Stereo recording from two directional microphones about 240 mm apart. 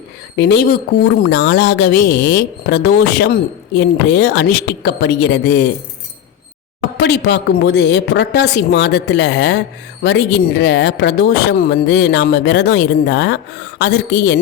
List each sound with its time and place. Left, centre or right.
0.3 s speech: left
6.9 s speech: left